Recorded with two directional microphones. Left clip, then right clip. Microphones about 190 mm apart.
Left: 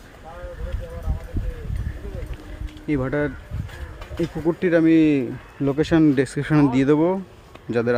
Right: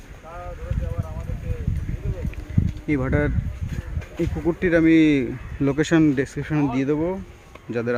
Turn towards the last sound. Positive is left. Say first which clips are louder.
# left 4 dB
turn(degrees=15)  # may be behind; listen again after turning